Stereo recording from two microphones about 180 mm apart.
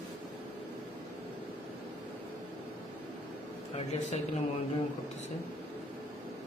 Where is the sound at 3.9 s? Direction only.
40° left (ahead or behind).